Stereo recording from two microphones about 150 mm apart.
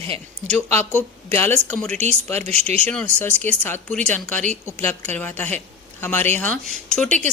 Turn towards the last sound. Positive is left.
turn(degrees=5)  # may be behind; listen again after turning